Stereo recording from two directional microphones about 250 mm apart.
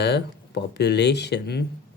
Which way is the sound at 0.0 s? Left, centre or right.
Left.